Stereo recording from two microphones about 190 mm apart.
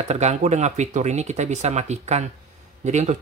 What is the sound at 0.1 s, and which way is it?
Speech, 35° right (ahead or behind).